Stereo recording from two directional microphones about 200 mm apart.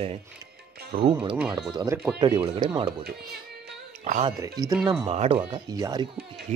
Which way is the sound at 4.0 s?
35° right (ahead or behind).